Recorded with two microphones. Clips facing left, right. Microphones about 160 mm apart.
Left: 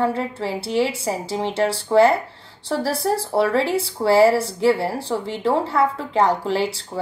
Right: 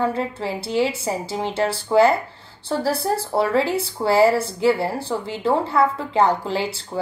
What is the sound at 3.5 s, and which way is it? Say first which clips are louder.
A woman's voice: even; 30° left (ahead or behind).